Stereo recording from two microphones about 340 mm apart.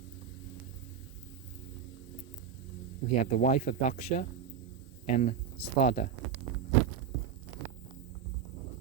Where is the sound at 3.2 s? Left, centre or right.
Left.